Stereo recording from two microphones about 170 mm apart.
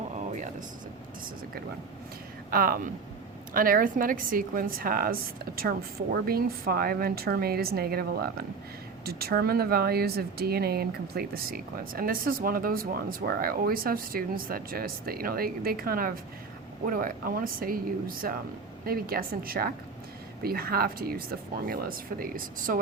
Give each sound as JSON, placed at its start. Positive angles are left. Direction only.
{"t": 2.5, "sound": "speech", "side_deg": -60}